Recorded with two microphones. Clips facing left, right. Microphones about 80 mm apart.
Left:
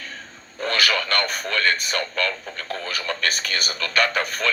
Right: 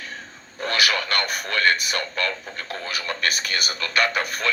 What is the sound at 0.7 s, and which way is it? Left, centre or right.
Radio, left.